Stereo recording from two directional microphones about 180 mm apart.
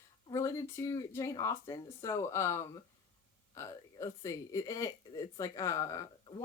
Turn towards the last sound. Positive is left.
turn(degrees=20)  # may be behind; listen again after turning